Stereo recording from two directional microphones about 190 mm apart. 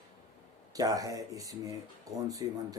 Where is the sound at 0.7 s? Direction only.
20° right (ahead or behind).